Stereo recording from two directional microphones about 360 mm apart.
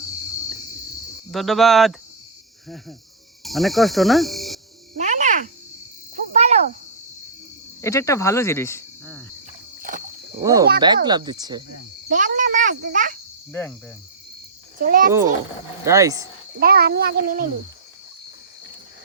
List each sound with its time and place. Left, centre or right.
1.3 s speech: centre
3.4 s cricket: centre
4.9 s a sound: centre
6.3 s cricket: centre
7.8 s speech: centre
10.4 s speech: centre
13.5 s speech: centre
14.8 s speech: right
15.8 s speech: centre
16.6 s speech: right